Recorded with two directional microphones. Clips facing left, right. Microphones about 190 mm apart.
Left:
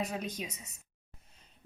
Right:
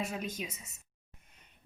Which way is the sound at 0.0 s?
35° left (ahead or behind).